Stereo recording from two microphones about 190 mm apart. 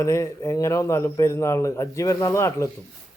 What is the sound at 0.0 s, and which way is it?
A man's voice, 15° left (ahead or behind).